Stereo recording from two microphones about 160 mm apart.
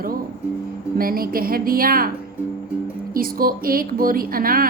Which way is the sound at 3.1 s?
65° right (ahead or behind).